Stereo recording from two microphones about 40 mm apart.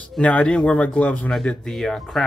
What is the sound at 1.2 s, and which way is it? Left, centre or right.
Speech, centre.